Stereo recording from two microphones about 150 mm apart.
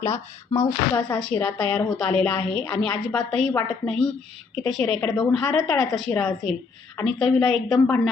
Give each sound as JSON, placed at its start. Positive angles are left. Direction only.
{"t": 0.0, "sound": "speech", "side_deg": 20}
{"t": 1.1, "sound": "a woman's voice", "side_deg": 5}